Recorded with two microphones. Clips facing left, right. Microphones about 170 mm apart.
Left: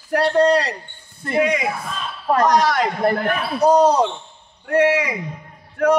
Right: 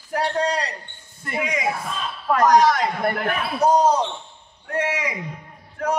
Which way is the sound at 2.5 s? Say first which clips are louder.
Even; 70° left (ahead or behind).